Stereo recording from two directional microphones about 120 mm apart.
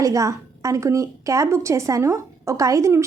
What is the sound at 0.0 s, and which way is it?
A woman's voice, 30° right (ahead or behind).